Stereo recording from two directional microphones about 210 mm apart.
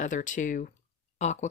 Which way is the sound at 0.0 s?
35° left (ahead or behind).